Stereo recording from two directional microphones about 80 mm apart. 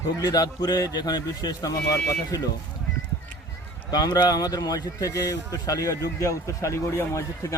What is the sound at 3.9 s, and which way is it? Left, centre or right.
Speech, left.